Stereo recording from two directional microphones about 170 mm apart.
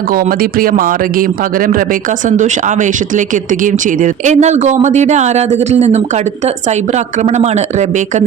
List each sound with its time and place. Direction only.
0.1 s a woman's voice: 55° right (ahead or behind)